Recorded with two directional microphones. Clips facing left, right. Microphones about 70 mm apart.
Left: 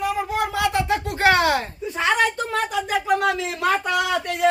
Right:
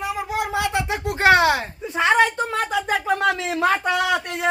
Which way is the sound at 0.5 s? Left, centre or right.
Right.